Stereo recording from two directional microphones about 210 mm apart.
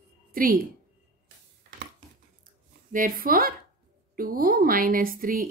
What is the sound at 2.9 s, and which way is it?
A woman's voice, 40° right (ahead or behind).